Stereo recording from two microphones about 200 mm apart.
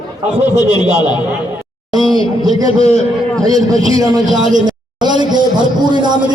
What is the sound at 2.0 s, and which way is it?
Speech, 25° left (ahead or behind).